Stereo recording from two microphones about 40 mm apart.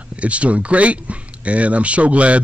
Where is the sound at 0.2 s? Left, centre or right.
Right.